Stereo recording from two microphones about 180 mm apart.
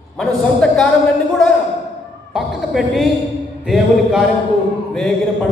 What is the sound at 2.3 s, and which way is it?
A man's voice, centre (ahead or behind).